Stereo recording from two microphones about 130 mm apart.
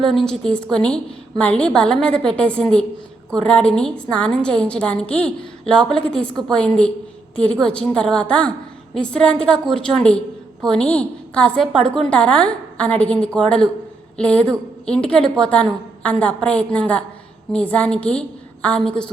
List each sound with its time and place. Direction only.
0.0 s a woman's voice: centre (ahead or behind)